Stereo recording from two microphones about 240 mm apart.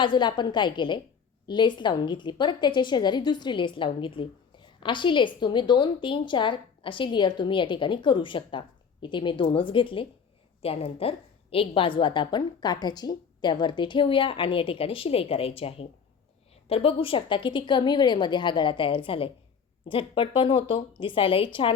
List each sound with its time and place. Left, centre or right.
0.0 s a woman's voice: centre